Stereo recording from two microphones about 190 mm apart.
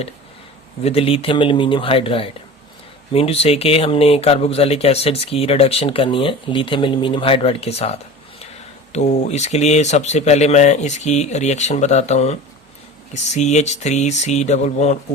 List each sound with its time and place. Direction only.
0.9 s speech: 30° left (ahead or behind)